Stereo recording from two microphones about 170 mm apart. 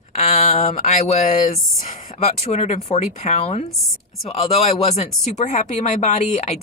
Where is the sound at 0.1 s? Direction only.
40° left (ahead or behind).